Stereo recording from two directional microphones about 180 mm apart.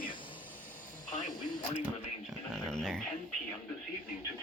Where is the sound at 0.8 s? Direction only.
45° left (ahead or behind).